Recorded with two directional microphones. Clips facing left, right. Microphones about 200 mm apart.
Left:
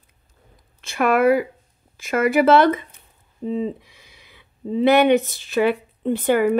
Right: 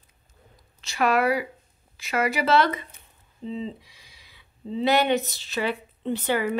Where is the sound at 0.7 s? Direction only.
55° left (ahead or behind).